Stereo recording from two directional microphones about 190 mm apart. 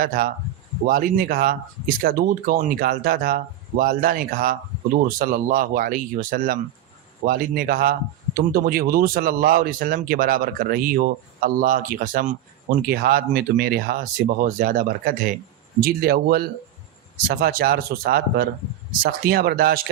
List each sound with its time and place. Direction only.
0.0 s speech: 50° right (ahead or behind)